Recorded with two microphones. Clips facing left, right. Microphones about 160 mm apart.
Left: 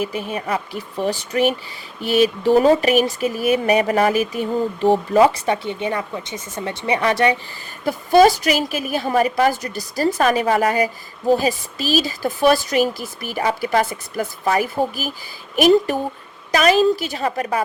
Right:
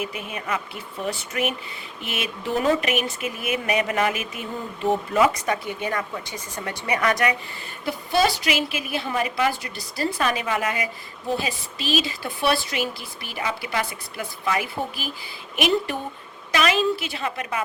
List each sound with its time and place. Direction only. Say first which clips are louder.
0.0 s speech: left 6 dB; 35° left (ahead or behind)
7.9 s speech: left 9 dB; 45° left (ahead or behind)